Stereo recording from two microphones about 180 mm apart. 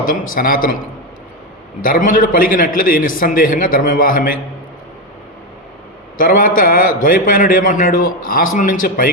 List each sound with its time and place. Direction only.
0.0 s a man's voice: 50° left (ahead or behind)
1.8 s a man's voice: 50° left (ahead or behind)
6.1 s a man's voice: 50° left (ahead or behind)